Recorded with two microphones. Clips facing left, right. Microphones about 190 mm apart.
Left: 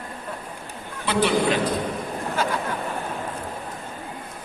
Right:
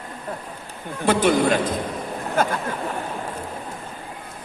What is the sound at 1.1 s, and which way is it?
Speech, 45° right (ahead or behind).